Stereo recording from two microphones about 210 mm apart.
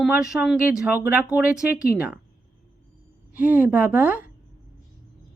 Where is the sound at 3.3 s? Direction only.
10° right (ahead or behind).